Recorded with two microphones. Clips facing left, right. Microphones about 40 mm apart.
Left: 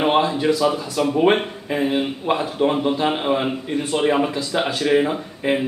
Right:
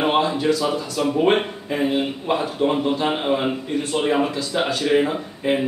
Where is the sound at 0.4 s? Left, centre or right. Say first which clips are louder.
Left 2 dB; centre.